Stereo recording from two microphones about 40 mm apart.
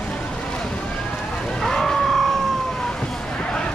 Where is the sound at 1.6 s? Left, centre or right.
Centre.